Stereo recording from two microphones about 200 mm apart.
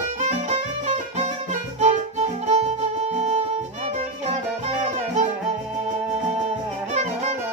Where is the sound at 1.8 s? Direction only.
35° right (ahead or behind).